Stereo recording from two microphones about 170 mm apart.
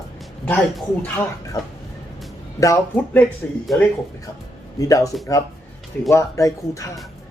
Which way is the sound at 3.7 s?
Centre (ahead or behind).